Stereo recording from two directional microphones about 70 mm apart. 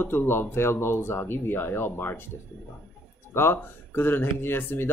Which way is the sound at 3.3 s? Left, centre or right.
Left.